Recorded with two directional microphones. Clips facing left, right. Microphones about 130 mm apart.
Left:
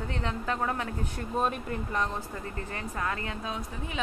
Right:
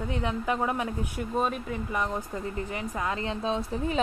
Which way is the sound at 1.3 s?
Centre (ahead or behind).